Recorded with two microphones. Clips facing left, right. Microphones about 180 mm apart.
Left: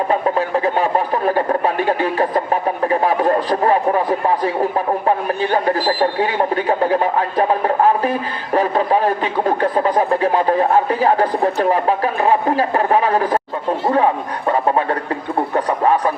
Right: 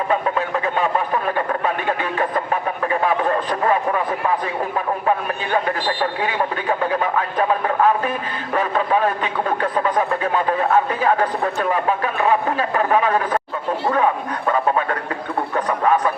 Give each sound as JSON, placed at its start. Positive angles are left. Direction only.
{"t": 0.1, "sound": "speech", "side_deg": 35}
{"t": 5.0, "sound": "speech", "side_deg": 35}
{"t": 15.5, "sound": "a sound", "side_deg": 35}